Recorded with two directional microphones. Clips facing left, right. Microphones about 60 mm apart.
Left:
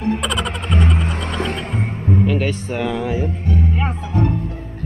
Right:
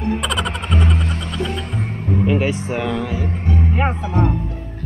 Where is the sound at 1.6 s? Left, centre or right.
Left.